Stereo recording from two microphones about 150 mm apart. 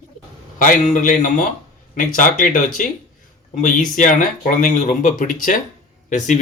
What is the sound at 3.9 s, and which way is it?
Speech, 60° left (ahead or behind).